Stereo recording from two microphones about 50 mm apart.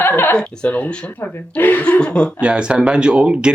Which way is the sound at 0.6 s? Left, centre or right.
Left.